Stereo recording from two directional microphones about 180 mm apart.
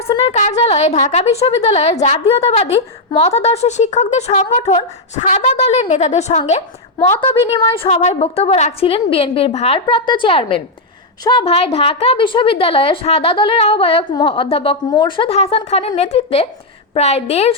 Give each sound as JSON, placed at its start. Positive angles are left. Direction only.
{"t": 0.1, "sound": "a woman's voice", "side_deg": 35}
{"t": 7.8, "sound": "a woman's voice", "side_deg": 35}